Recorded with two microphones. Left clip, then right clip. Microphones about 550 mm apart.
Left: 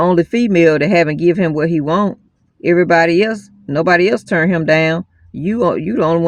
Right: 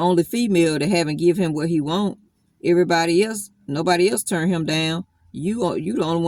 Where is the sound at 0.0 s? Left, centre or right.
Right.